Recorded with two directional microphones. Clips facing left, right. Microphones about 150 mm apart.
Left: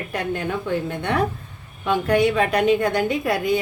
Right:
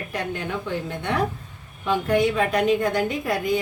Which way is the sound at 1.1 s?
60° left (ahead or behind).